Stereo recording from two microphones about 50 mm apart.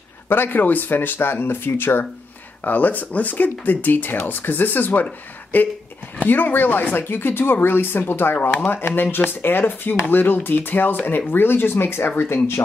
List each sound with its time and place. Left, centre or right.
0.3 s speech: left
2.6 s speech: left